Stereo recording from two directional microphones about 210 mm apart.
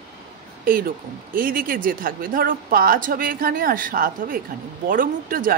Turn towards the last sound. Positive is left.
turn(degrees=-40)  # may be behind; listen again after turning